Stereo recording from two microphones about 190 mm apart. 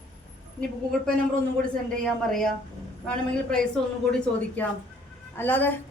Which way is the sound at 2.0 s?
Centre (ahead or behind).